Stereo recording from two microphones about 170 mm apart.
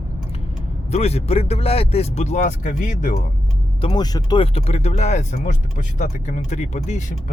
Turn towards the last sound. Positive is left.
turn(degrees=45)  # may be behind; listen again after turning